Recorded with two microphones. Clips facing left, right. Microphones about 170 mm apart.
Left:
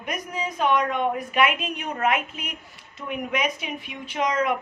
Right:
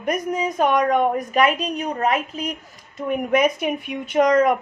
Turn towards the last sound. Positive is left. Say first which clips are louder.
# right 8 dB
turn(degrees=-45)  # may be behind; listen again after turning